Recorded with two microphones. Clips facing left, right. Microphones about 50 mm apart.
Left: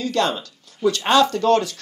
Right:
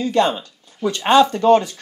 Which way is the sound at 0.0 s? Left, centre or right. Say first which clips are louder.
Right 4 dB; centre.